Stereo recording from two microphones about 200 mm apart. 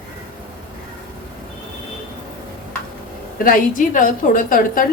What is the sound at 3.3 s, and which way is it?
A woman's voice, 45° left (ahead or behind).